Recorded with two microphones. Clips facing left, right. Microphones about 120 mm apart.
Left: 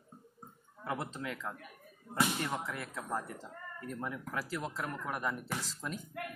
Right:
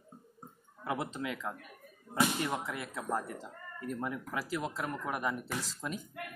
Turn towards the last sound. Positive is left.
turn(degrees=-15)  # may be behind; listen again after turning